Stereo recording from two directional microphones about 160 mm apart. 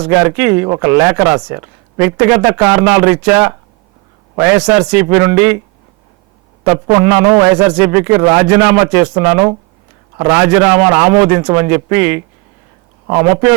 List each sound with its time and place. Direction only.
0.1 s a man's voice: 10° right (ahead or behind)
1.4 s speech: 25° right (ahead or behind)
2.0 s a man's voice: 10° right (ahead or behind)
6.8 s a man's voice: 10° right (ahead or behind)